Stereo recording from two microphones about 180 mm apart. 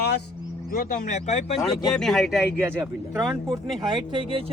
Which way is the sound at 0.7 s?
45° left (ahead or behind).